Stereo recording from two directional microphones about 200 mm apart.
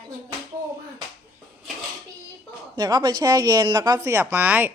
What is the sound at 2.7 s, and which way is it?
Speech, 20° right (ahead or behind).